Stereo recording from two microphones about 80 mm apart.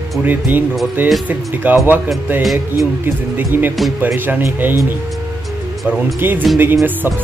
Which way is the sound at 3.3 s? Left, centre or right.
Right.